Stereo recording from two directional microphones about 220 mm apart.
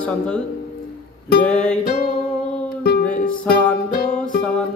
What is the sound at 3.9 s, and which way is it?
Music, 45° left (ahead or behind).